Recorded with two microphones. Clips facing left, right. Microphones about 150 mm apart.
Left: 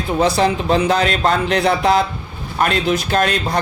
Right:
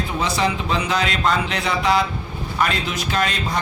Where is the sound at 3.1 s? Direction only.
50° left (ahead or behind).